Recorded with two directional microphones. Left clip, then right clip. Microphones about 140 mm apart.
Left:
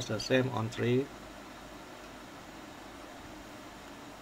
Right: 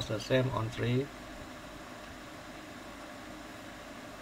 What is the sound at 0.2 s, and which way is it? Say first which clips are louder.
Speech: left 1 dB; 40° left (ahead or behind).